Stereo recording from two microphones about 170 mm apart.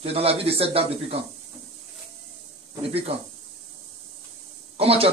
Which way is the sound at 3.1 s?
35° right (ahead or behind).